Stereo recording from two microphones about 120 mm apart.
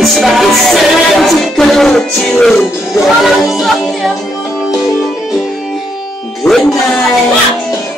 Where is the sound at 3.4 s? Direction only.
Centre (ahead or behind).